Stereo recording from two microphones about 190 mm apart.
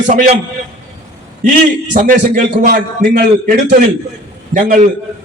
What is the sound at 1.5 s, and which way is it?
A man's voice, 45° right (ahead or behind).